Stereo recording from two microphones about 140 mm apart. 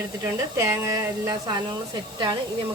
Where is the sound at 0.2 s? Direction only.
25° right (ahead or behind).